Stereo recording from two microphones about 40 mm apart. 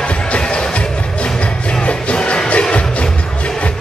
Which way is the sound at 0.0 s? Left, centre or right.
Left.